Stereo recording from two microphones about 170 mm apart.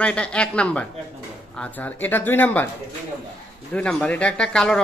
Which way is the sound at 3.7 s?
5° left (ahead or behind).